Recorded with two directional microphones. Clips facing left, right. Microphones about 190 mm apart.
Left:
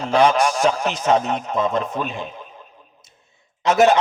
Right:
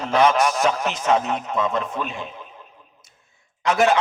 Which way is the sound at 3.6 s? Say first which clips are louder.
Left 4 dB; 25° left (ahead or behind).